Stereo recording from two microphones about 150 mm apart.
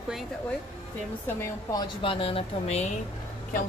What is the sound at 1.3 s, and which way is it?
Speech, 25° left (ahead or behind).